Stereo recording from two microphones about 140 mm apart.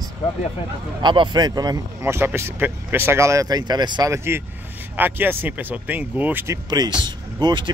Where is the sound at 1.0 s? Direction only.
35° right (ahead or behind).